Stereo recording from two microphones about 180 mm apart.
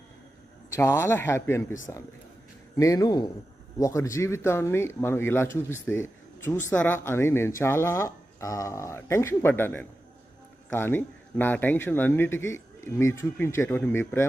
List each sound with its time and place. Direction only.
0.7 s speech: 15° left (ahead or behind)
6.0 s a sound: 15° left (ahead or behind)
6.7 s speech: 10° left (ahead or behind)